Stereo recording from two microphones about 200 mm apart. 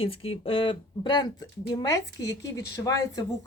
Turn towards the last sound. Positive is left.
turn(degrees=15)  # may be behind; listen again after turning